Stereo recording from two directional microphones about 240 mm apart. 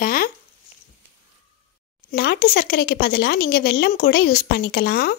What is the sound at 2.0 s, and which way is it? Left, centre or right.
Speech, left.